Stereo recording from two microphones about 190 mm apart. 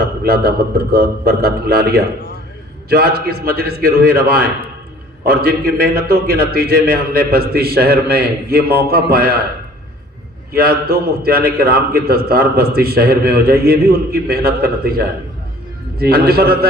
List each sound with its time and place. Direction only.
0.2 s a man's voice: 55° right (ahead or behind)
10.5 s a man's voice: 50° right (ahead or behind)